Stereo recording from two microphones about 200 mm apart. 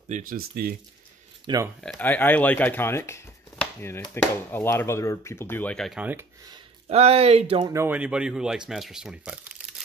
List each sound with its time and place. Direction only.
0.1 s speech: 40° right (ahead or behind)
1.5 s speech: 25° right (ahead or behind)
1.8 s speech: 5° left (ahead or behind)
6.5 s speech: 30° right (ahead or behind)
7.6 s speech: 15° right (ahead or behind)